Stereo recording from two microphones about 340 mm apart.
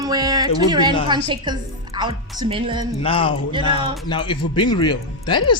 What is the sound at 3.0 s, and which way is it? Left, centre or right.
Speech, centre.